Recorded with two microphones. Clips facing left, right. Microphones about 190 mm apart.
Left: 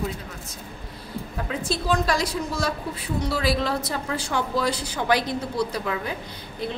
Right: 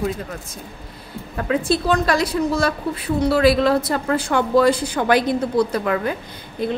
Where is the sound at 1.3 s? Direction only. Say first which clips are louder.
Right 9 dB; 65° right (ahead or behind).